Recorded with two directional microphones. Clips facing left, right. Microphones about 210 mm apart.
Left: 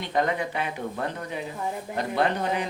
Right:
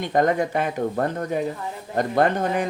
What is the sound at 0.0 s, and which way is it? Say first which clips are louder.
Speech: right 6 dB; 45° right (ahead or behind).